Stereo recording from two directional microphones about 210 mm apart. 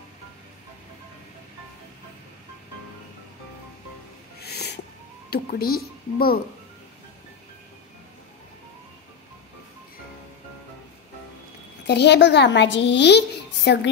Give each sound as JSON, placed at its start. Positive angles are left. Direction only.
{"t": 4.4, "sound": "owl", "side_deg": 50}
{"t": 5.3, "sound": "a woman's voice", "side_deg": 45}
{"t": 11.8, "sound": "speech", "side_deg": 55}